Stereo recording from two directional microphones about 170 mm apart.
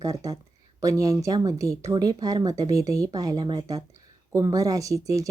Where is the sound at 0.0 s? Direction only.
20° right (ahead or behind).